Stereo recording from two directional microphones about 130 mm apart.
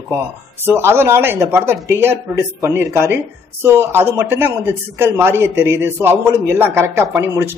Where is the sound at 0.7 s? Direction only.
20° right (ahead or behind).